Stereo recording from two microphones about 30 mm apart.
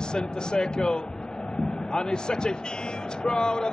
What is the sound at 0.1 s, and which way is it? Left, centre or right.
Speech, left.